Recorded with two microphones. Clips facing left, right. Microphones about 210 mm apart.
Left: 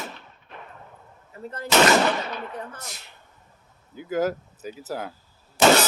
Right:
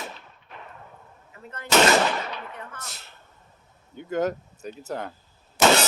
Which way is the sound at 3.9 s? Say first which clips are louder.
Left 1 dB; 5° left (ahead or behind).